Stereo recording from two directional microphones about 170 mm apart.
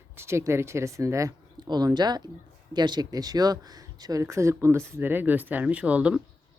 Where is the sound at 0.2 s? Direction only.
15° right (ahead or behind).